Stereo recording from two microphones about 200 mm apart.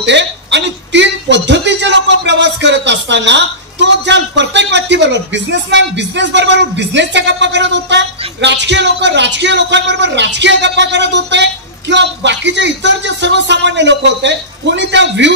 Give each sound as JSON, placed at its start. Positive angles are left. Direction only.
{"t": 0.0, "sound": "speech", "side_deg": -60}